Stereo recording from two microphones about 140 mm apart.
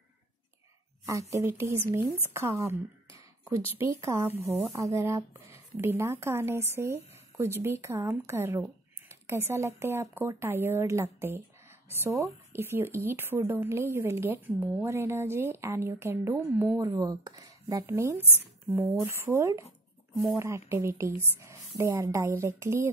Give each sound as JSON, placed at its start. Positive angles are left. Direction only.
{"t": 1.3, "sound": "a woman's voice", "side_deg": -20}